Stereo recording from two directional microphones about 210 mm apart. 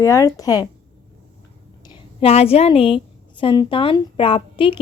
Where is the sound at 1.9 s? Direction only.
30° left (ahead or behind).